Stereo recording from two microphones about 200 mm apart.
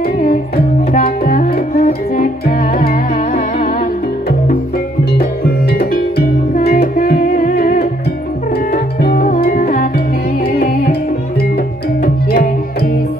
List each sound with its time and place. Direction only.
0.0 s music: 50° left (ahead or behind)
5.4 s music: 50° left (ahead or behind)
10.4 s music: 50° left (ahead or behind)